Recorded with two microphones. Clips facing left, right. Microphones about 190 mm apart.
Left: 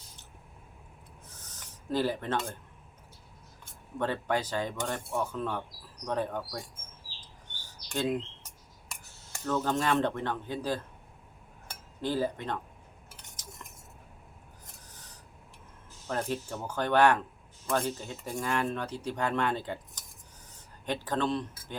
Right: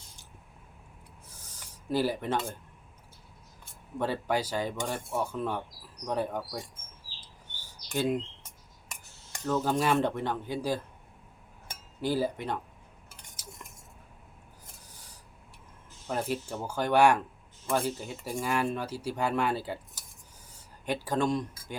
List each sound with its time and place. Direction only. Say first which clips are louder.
1.3 s filing: even; 10° right (ahead or behind)
3.9 s speech: right 1 dB; 10° right (ahead or behind)
7.5 s chirp: even; 5° right (ahead or behind)
7.9 s speech: right 2 dB; 10° right (ahead or behind)
9.5 s speech: right 1 dB; 10° right (ahead or behind)
12.0 s speech: right 1 dB; 10° right (ahead or behind)
13.4 s stir: right 2 dB; 10° right (ahead or behind)
14.8 s filing: left 1 dB; 10° right (ahead or behind)
16.0 s speech: right 1 dB; 10° right (ahead or behind)